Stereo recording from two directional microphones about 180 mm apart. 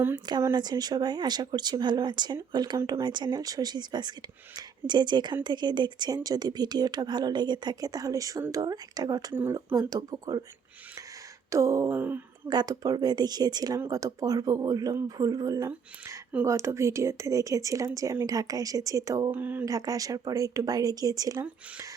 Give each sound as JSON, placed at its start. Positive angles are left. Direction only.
{"t": 0.3, "sound": "speech", "side_deg": -20}
{"t": 11.5, "sound": "a sound", "side_deg": -15}
{"t": 12.5, "sound": "speech", "side_deg": -20}